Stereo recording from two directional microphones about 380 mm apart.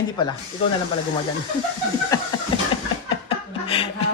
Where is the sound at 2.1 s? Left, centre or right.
Centre.